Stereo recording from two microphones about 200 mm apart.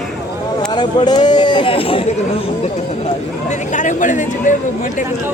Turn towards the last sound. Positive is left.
turn(degrees=40)  # may be behind; listen again after turning